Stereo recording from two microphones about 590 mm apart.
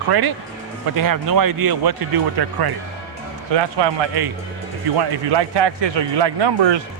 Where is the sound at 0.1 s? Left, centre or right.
Right.